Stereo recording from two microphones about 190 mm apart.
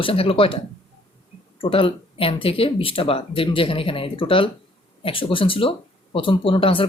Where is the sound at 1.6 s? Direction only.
25° left (ahead or behind).